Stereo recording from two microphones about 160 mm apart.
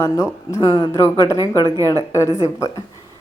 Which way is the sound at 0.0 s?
20° left (ahead or behind).